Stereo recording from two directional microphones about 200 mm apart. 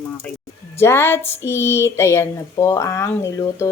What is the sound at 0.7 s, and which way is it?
Speech, 10° left (ahead or behind).